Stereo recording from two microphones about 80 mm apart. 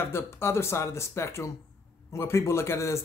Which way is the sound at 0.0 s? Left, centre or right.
Left.